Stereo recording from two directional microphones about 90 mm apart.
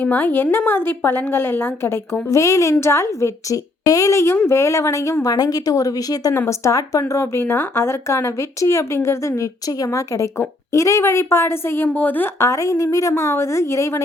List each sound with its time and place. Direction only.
0.0 s a woman's voice: 20° left (ahead or behind); by 6.3 s 40° left (ahead or behind)
6.3 s speech: 30° left (ahead or behind)
12.4 s speech: 35° left (ahead or behind)